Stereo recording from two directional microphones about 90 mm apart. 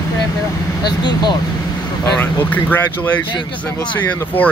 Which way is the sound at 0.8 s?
55° left (ahead or behind).